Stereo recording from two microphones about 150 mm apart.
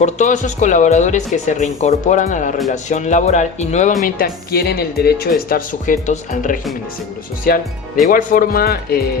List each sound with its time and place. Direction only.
0.0 s speech: 55° left (ahead or behind)
4.0 s speech: 85° left
5.5 s speech: 65° left (ahead or behind)
8.1 s speech: 65° left (ahead or behind); by 9.0 s 90° left